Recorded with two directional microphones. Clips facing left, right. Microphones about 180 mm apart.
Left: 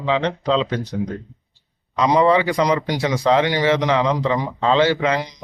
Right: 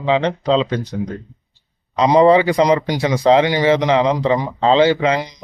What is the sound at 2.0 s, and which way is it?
Speech, 30° right (ahead or behind).